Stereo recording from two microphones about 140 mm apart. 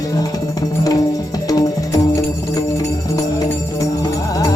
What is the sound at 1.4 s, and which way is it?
Music, 25° left (ahead or behind).